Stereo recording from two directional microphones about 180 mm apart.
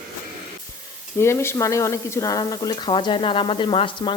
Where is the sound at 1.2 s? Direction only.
15° left (ahead or behind).